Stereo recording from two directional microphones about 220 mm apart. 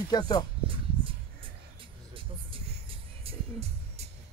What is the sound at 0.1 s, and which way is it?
Speech, 20° left (ahead or behind).